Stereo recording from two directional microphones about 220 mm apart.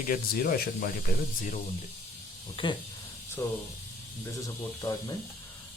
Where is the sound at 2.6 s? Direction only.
20° left (ahead or behind).